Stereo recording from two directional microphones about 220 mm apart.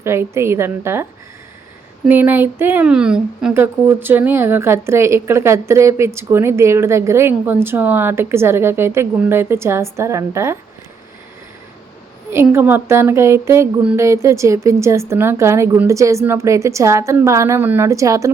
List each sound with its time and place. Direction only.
0.0 s speech: 10° right (ahead or behind)
2.0 s speech: 10° right (ahead or behind)
12.3 s speech: 10° right (ahead or behind)